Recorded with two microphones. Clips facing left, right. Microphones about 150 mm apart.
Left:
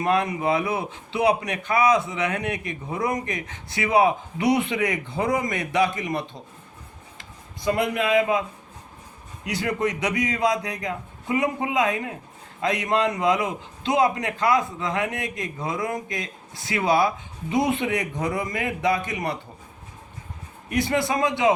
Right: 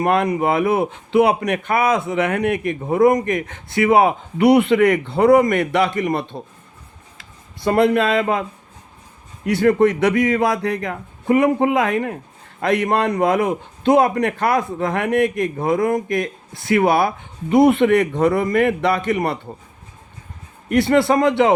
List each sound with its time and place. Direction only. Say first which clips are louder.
0.0 s a man's voice: right 5 dB; 55° right (ahead or behind)
7.6 s speech: right 8 dB; 65° right (ahead or behind)
9.6 s a man's voice: right 10 dB; 55° right (ahead or behind)
20.7 s speech: right 8 dB; 65° right (ahead or behind)